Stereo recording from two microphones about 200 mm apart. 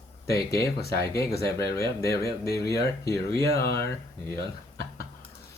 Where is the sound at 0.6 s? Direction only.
50° left (ahead or behind).